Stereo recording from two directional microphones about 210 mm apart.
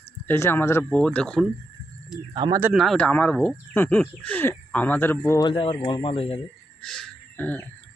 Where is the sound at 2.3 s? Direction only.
20° right (ahead or behind).